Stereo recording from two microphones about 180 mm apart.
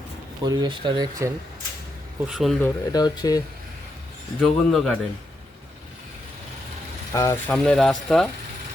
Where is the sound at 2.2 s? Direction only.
Centre (ahead or behind).